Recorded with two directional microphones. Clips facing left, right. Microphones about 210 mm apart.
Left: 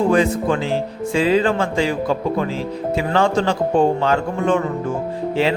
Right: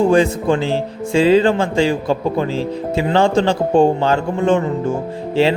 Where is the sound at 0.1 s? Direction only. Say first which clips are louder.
Right 3 dB; 30° right (ahead or behind).